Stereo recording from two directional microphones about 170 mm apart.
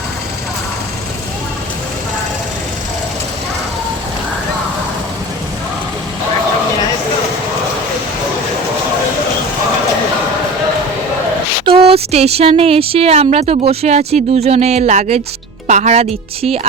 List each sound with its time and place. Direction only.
11.6 s speech: 35° right (ahead or behind)